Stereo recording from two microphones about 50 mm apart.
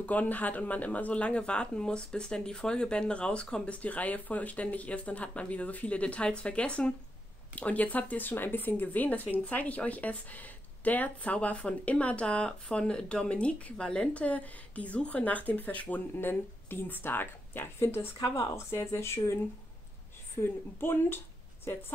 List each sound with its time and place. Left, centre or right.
0.0 s speech: left
16.2 s speech: left
18.3 s speech: left
20.3 s speech: left